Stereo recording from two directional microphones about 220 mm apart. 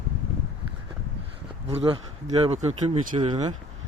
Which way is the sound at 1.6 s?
25° right (ahead or behind).